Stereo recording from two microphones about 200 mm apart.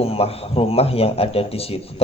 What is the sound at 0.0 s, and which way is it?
A man's voice, 30° left (ahead or behind).